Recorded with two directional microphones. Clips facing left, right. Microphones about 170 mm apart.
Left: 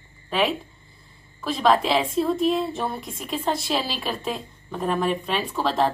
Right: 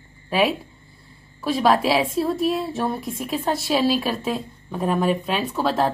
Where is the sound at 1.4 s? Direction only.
5° right (ahead or behind).